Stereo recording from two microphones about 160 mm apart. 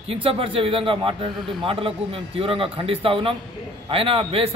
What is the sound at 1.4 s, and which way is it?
Speech, centre (ahead or behind).